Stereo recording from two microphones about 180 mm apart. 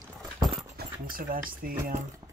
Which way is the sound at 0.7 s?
55° right (ahead or behind).